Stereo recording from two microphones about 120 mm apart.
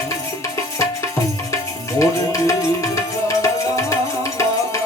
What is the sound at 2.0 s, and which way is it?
Music, 25° left (ahead or behind).